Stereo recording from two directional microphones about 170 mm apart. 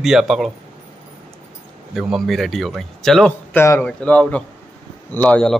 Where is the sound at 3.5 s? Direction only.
15° left (ahead or behind).